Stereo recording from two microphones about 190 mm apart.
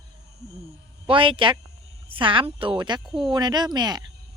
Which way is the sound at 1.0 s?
25° right (ahead or behind).